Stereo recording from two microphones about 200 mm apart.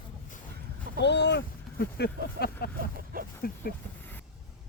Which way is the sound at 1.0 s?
60° left (ahead or behind).